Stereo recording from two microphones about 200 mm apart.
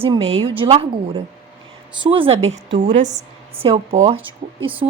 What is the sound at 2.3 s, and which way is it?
Speech, 75° right (ahead or behind).